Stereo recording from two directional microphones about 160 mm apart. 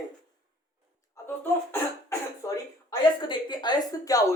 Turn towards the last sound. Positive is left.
turn(degrees=20)  # may be behind; listen again after turning